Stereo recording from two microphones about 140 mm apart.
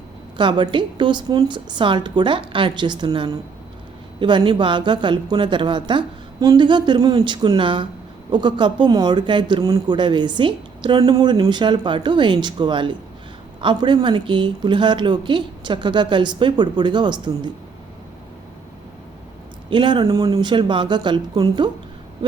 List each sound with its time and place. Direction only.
0.3 s speech: 35° right (ahead or behind)
19.7 s speech: 35° right (ahead or behind)